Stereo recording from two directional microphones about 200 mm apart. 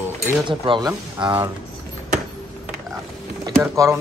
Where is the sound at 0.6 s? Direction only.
25° right (ahead or behind).